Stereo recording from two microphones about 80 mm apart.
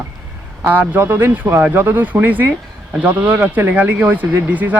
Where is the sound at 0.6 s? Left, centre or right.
Right.